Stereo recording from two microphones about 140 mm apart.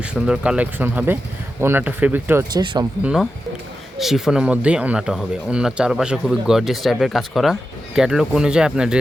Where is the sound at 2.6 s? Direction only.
30° right (ahead or behind).